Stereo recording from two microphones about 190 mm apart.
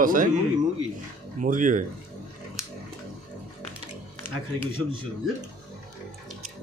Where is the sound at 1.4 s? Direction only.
45° right (ahead or behind).